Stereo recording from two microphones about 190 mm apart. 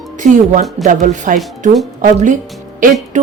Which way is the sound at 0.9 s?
40° right (ahead or behind).